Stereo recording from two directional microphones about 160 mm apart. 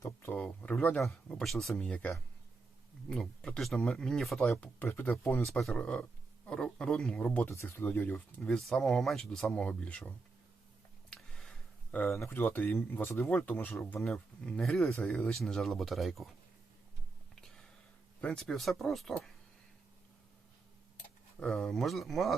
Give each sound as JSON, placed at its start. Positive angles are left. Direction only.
{"t": 0.0, "sound": "speech", "side_deg": 15}
{"t": 5.5, "sound": "speech", "side_deg": 0}
{"t": 11.1, "sound": "a sound", "side_deg": 5}
{"t": 12.2, "sound": "speech", "side_deg": 15}
{"t": 18.2, "sound": "speech", "side_deg": 5}
{"t": 21.3, "sound": "speech", "side_deg": 5}